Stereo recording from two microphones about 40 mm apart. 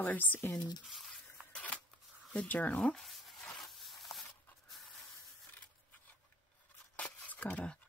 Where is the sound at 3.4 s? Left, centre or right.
Centre.